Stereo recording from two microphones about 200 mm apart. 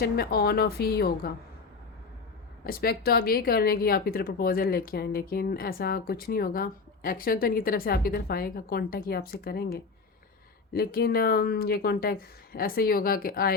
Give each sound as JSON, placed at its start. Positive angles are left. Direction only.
{"t": 0.0, "sound": "speech", "side_deg": 50}
{"t": 2.6, "sound": "speech", "side_deg": 50}